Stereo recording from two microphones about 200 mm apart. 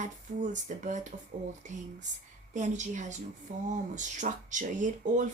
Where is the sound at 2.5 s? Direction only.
35° right (ahead or behind).